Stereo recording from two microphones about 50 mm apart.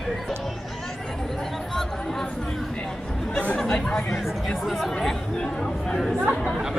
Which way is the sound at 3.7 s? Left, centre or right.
Centre.